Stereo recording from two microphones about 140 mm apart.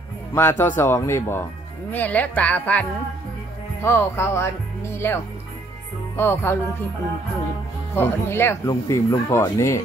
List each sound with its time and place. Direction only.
0.3 s speech: 15° left (ahead or behind)
7.9 s speech: 15° left (ahead or behind)